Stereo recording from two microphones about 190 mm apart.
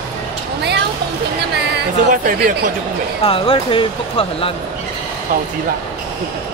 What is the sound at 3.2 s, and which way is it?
Speech, 30° left (ahead or behind).